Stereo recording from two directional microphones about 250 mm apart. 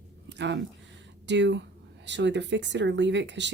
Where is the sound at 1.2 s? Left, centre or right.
Right.